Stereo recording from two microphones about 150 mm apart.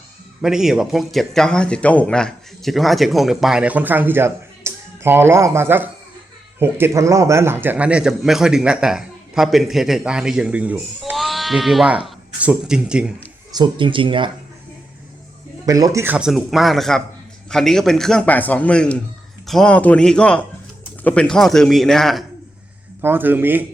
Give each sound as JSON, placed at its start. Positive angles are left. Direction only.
{"t": 0.4, "sound": "a man's voice", "side_deg": -5}
{"t": 11.2, "sound": "sheep", "side_deg": 0}
{"t": 12.0, "sound": "speech", "side_deg": -5}
{"t": 13.5, "sound": "speech", "side_deg": -30}
{"t": 15.6, "sound": "speech", "side_deg": -25}
{"t": 16.1, "sound": "a man's voice", "side_deg": -5}
{"t": 23.0, "sound": "a man's voice", "side_deg": -15}